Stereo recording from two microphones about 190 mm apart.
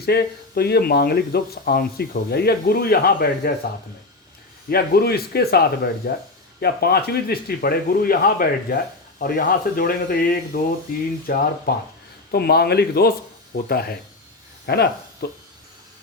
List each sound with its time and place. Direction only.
0.0 s speech: 55° left (ahead or behind)
4.7 s speech: 55° left (ahead or behind)